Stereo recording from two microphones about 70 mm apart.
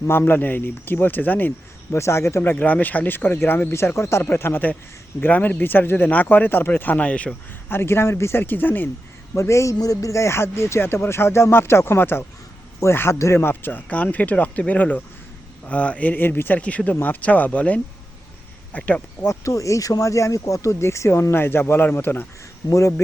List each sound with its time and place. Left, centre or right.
0.1 s speech: left
1.9 s speech: left
2.4 s speech: left
7.7 s speech: left
9.3 s speech: left
13.4 s speech: left
16.6 s speech: centre
19.2 s speech: left
22.7 s speech: left